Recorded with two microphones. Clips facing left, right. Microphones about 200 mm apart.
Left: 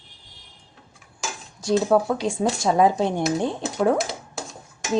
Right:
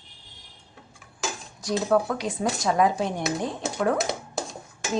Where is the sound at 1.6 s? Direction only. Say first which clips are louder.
Left 4 dB; 25° left (ahead or behind).